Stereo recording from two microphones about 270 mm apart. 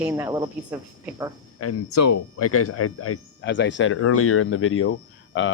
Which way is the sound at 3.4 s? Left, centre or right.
Left.